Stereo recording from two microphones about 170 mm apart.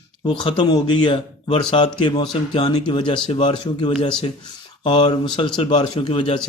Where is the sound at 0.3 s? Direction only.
30° left (ahead or behind).